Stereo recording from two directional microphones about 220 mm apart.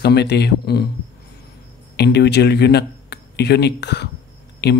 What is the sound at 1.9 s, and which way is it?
Speech, 50° left (ahead or behind).